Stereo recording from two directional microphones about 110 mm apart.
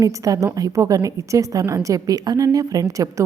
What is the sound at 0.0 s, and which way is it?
Speech, 30° right (ahead or behind).